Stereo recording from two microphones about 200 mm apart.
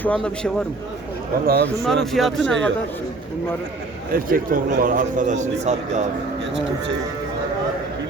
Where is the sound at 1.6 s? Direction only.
Centre (ahead or behind).